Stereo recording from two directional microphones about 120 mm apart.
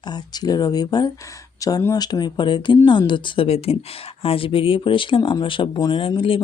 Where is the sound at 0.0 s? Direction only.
35° left (ahead or behind).